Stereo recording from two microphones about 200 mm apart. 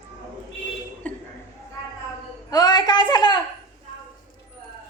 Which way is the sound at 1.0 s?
5° left (ahead or behind).